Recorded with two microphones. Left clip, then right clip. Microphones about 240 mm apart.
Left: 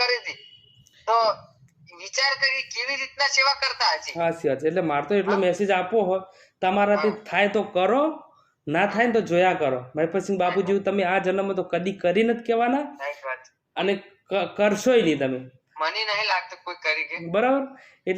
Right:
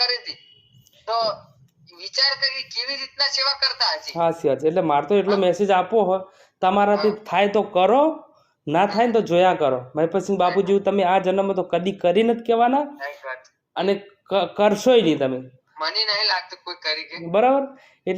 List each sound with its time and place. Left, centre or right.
0.0 s a sound: left
1.0 s speech: left
4.1 s speech: centre
13.3 s a sound: centre
13.7 s speech: centre
15.7 s a man's voice: centre
17.3 s speech: centre